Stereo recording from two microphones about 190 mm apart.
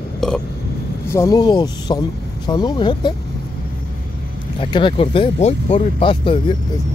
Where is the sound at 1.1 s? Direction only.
15° left (ahead or behind).